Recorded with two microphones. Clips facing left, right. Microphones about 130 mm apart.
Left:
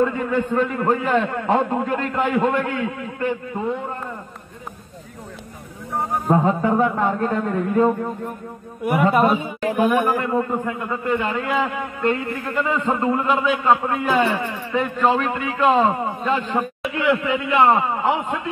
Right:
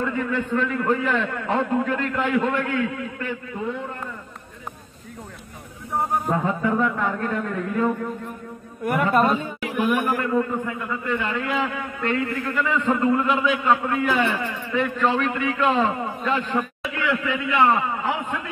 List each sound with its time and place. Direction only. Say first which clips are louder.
0.0 s a man's voice: left 5 dB; 30° left (ahead or behind)
6.3 s a man's voice: left 8 dB; 30° left (ahead or behind)
8.8 s a man's voice: left 3 dB; 10° left (ahead or behind)
10.1 s a man's voice: left 1 dB; 25° left (ahead or behind)